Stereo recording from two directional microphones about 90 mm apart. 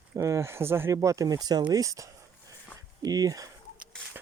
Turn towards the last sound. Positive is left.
turn(degrees=-40)  # may be behind; listen again after turning